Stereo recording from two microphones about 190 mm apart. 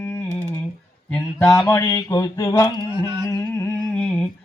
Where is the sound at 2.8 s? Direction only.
20° right (ahead or behind).